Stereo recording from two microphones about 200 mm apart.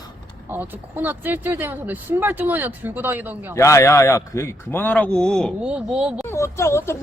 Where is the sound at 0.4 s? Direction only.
10° right (ahead or behind).